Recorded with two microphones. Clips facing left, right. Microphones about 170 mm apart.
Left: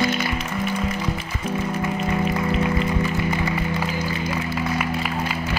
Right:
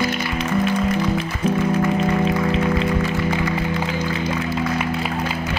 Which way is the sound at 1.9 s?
25° right (ahead or behind).